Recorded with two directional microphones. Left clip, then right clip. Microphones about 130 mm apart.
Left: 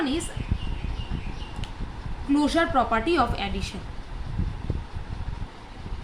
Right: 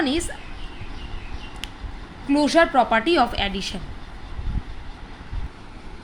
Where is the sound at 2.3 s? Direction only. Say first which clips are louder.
Right 5 dB; 50° right (ahead or behind).